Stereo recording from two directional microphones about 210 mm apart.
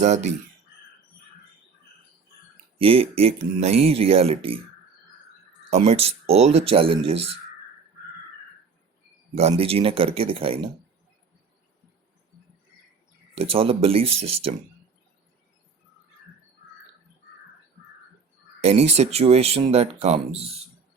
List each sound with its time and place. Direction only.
0.0 s speech: 35° right (ahead or behind)
2.7 s speech: 25° right (ahead or behind)
5.7 s speech: 30° right (ahead or behind)
9.3 s speech: 30° right (ahead or behind)
13.3 s speech: 25° right (ahead or behind)
18.6 s speech: 30° right (ahead or behind)